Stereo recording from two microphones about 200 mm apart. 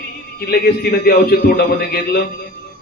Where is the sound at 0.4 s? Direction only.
50° left (ahead or behind).